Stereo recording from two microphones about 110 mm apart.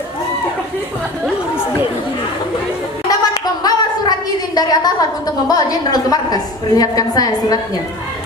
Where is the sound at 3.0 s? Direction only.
35° left (ahead or behind).